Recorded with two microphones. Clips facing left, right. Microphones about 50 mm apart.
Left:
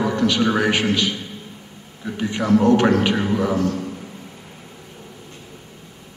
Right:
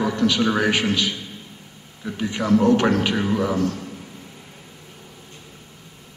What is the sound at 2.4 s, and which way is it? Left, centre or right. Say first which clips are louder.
Speech: left 1 dB; left.